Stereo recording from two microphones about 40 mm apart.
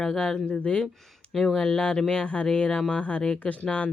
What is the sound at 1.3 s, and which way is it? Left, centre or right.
Speech, centre.